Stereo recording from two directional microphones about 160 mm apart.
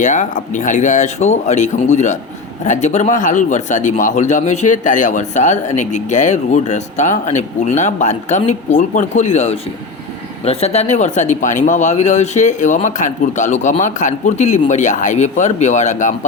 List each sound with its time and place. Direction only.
0.0 s a man's voice: 50° left (ahead or behind)